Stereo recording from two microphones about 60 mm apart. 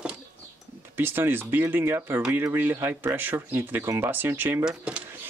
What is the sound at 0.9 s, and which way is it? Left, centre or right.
Speech, right.